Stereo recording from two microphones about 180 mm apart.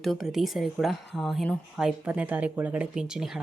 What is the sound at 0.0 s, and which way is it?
Speech, centre (ahead or behind).